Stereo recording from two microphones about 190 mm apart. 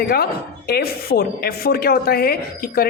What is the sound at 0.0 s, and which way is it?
A woman's voice, 55° left (ahead or behind).